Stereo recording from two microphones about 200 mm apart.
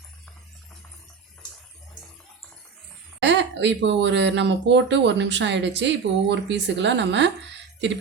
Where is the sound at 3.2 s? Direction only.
60° right (ahead or behind).